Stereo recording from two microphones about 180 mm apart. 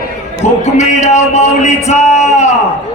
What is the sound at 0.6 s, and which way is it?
Speech, 40° left (ahead or behind).